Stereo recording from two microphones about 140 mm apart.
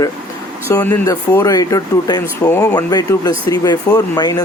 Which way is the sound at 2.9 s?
30° left (ahead or behind).